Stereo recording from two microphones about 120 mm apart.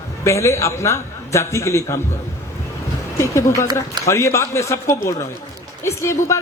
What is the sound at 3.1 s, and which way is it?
A man's voice, 25° left (ahead or behind).